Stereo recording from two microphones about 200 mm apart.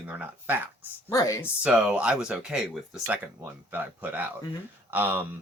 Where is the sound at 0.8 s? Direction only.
15° left (ahead or behind).